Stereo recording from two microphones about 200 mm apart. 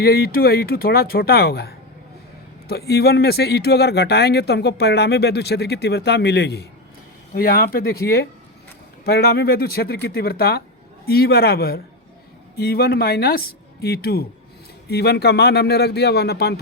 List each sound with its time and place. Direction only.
0.0 s speech: 50° left (ahead or behind)